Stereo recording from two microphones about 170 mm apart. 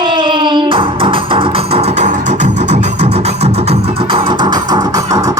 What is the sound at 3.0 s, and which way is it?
Music, 35° right (ahead or behind).